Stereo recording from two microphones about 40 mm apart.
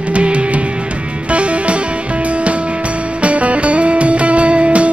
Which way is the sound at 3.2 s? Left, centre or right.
Right.